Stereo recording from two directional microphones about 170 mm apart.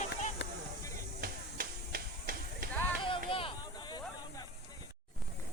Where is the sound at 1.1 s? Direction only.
60° right (ahead or behind).